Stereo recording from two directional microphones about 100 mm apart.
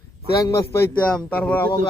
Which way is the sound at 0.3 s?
35° left (ahead or behind).